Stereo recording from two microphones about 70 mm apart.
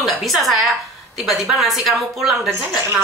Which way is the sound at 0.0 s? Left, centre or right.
Centre.